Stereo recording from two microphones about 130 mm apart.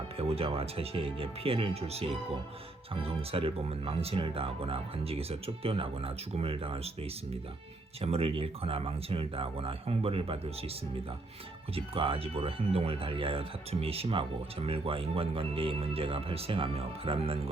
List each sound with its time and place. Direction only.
0.2 s speech: 50° right (ahead or behind)
8.0 s speech: 50° right (ahead or behind)
11.7 s speech: 45° right (ahead or behind)